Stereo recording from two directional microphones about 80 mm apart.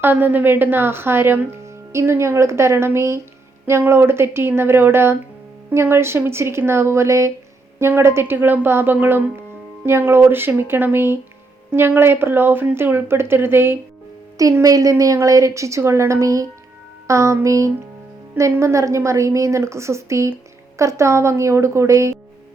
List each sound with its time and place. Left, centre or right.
0.0 s a woman's voice: right
14.6 s a woman's voice: right